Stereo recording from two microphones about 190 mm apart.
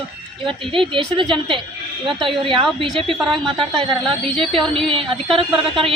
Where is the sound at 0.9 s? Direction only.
25° right (ahead or behind).